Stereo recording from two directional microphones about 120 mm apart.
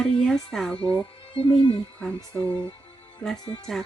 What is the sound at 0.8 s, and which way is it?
Speech, 45° left (ahead or behind).